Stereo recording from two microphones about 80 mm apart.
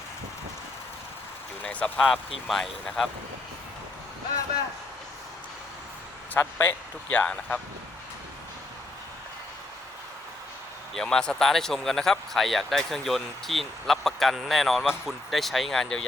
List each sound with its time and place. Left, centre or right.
1.6 s vehicle: centre
2.0 s speech: centre
6.3 s speech: left
10.9 s speech: centre